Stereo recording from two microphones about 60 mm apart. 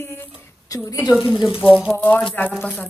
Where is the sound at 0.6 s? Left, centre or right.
Left.